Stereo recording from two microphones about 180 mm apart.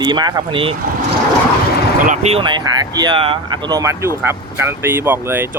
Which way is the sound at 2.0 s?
40° right (ahead or behind).